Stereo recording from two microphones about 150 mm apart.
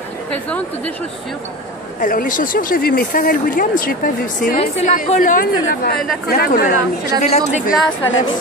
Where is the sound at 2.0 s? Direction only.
65° left (ahead or behind).